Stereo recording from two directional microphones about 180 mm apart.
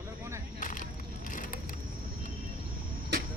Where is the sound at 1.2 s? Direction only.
45° left (ahead or behind).